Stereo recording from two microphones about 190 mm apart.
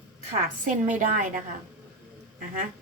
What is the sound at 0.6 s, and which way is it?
Speech, 45° right (ahead or behind).